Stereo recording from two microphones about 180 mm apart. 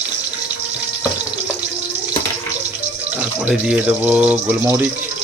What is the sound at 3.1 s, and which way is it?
Speech, 5° right (ahead or behind).